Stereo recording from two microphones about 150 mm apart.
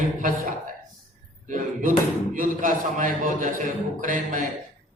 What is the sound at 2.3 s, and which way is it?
A man's voice, 65° right (ahead or behind).